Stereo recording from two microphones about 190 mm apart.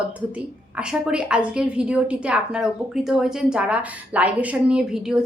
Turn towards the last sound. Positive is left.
turn(degrees=-5)  # may be behind; listen again after turning